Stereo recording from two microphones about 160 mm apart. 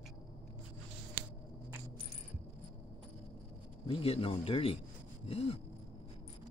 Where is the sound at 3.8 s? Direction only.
35° left (ahead or behind).